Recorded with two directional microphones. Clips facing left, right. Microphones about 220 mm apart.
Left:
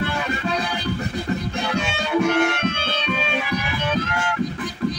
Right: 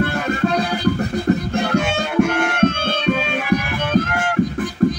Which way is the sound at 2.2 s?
50° right (ahead or behind).